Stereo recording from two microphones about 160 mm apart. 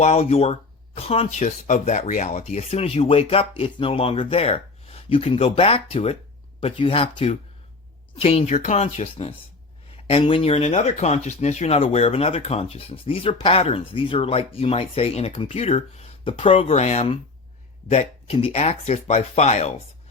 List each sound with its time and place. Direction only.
0.0 s speech: 40° left (ahead or behind)